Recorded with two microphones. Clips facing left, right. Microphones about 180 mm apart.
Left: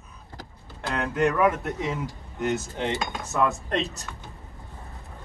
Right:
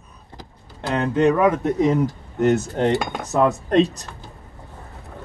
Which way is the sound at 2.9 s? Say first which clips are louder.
Right 7 dB; 65° right (ahead or behind).